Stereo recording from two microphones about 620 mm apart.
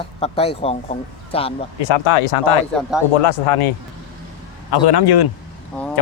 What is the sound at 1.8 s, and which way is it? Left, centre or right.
Speech, left.